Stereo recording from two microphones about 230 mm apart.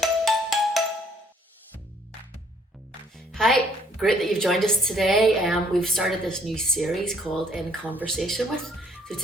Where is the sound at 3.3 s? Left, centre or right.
Centre.